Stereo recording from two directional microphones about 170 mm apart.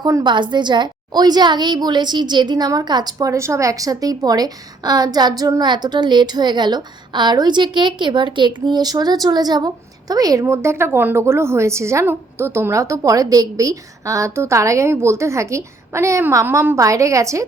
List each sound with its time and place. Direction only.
0.0 s a woman's voice: 25° right (ahead or behind)